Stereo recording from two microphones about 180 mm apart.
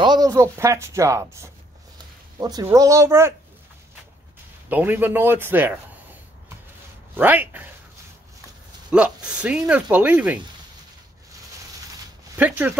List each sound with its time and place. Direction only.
0.0 s speech: 20° right (ahead or behind)
4.6 s speech: 10° right (ahead or behind)
7.2 s speech: 10° right (ahead or behind)
8.9 s speech: 5° right (ahead or behind)
12.4 s speech: 10° right (ahead or behind)